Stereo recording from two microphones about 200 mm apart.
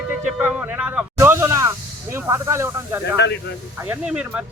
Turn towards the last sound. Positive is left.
turn(degrees=-5)  # may be behind; listen again after turning